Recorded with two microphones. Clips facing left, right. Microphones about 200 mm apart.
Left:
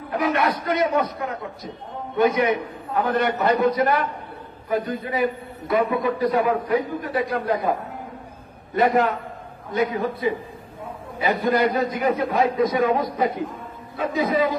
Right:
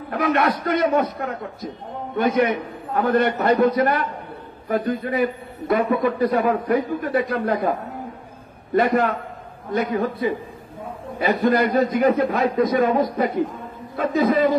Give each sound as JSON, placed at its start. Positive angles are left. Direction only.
{"t": 0.1, "sound": "a man's voice", "side_deg": -50}
{"t": 8.7, "sound": "a man's voice", "side_deg": -55}
{"t": 11.1, "sound": "a man's voice", "side_deg": -55}